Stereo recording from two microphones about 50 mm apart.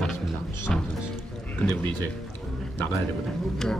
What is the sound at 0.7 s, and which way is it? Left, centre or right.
Speech, centre.